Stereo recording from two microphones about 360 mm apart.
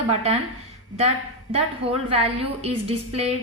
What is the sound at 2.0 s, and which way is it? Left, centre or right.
A woman's voice, centre.